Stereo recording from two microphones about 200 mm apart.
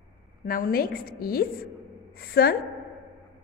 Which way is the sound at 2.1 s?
50° left (ahead or behind).